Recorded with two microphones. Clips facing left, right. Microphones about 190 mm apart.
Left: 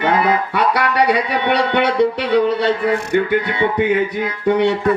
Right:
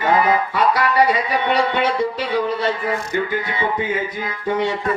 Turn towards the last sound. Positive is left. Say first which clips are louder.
# left 6 dB
turn(degrees=65)  # may be behind; listen again after turning